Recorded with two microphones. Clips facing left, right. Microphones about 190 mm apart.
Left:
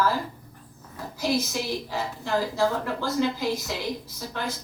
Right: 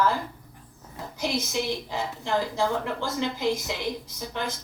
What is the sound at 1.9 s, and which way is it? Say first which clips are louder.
Speech: left 1 dB; 20° right (ahead or behind).